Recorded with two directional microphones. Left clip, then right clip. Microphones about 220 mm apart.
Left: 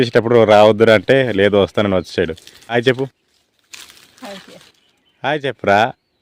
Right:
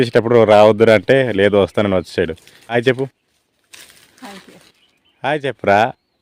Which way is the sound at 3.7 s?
30° left (ahead or behind).